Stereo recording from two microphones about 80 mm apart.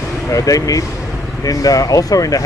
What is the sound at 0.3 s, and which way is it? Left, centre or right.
Speech, left.